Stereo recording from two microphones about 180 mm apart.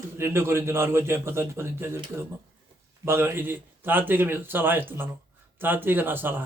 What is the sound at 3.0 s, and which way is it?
Speech, 15° right (ahead or behind).